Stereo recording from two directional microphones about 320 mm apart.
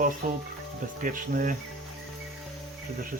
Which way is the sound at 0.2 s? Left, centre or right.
Right.